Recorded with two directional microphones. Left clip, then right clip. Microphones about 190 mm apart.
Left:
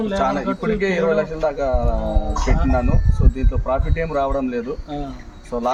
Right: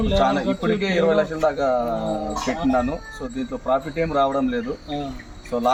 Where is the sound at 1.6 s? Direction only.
20° left (ahead or behind).